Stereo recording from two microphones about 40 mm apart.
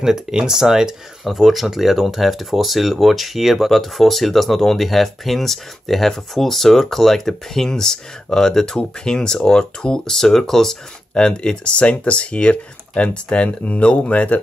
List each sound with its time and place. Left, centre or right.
0.0 s speech: centre
1.2 s speech: centre
3.7 s speech: centre; by 14.4 s left